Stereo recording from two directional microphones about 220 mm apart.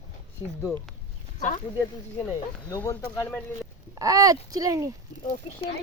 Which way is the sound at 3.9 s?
15° right (ahead or behind).